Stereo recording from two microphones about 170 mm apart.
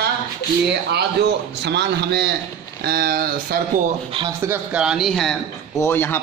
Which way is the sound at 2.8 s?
70° right (ahead or behind).